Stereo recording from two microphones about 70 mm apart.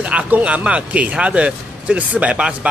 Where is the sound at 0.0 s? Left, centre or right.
Centre.